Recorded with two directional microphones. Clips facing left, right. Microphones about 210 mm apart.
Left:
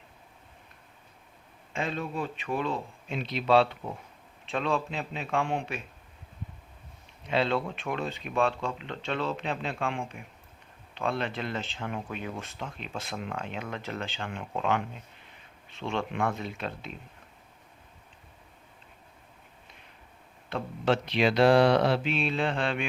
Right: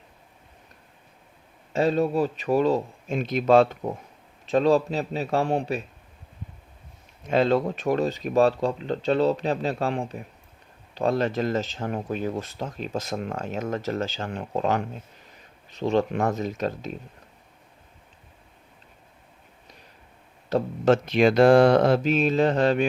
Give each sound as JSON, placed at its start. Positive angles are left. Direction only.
{"t": 1.7, "sound": "speech", "side_deg": -40}
{"t": 7.3, "sound": "speech", "side_deg": -45}
{"t": 20.5, "sound": "speech", "side_deg": -45}